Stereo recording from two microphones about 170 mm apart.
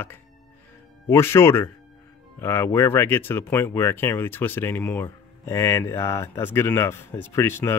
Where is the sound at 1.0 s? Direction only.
15° left (ahead or behind).